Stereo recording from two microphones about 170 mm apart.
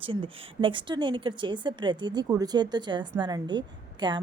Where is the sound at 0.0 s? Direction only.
30° right (ahead or behind).